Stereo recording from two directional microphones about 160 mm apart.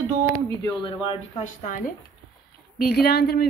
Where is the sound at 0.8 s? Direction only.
30° left (ahead or behind).